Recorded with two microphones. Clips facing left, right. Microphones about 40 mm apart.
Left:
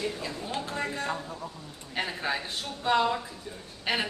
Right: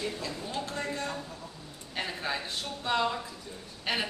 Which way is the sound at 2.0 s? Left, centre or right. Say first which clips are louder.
Left 3 dB; centre.